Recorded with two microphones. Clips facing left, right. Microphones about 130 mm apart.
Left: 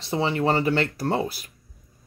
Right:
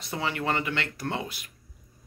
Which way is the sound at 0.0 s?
30° left (ahead or behind).